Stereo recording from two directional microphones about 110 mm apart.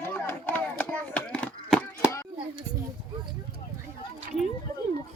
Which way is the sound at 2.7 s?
90° right.